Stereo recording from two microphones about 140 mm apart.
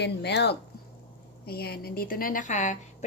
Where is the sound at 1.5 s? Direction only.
90° left; by 2.7 s 60° left (ahead or behind).